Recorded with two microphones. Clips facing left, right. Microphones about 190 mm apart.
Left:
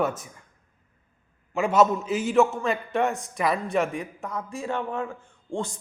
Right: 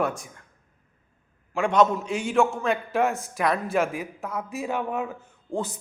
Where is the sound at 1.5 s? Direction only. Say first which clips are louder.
Even; 5° left (ahead or behind).